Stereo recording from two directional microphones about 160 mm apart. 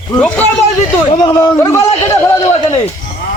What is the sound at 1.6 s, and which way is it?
Speech, 15° left (ahead or behind).